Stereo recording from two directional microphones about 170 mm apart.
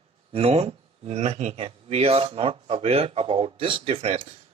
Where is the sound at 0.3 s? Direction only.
35° right (ahead or behind).